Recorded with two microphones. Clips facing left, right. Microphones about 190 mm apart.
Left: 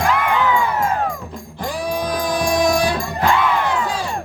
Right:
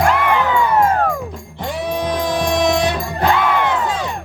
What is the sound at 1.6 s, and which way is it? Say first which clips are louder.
Music: right 1 dB; 25° right (ahead or behind).